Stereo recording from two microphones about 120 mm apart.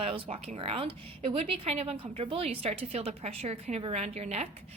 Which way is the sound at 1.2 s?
60° right (ahead or behind).